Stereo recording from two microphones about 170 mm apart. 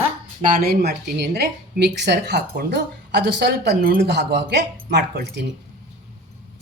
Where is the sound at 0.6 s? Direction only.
70° right (ahead or behind).